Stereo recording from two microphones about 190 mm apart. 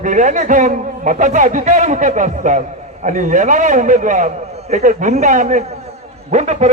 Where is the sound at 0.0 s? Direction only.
40° right (ahead or behind).